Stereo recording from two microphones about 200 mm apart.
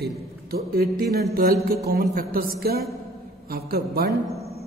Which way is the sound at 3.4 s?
50° right (ahead or behind).